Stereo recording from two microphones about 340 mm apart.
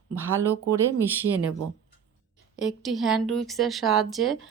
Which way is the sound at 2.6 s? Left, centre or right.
Centre.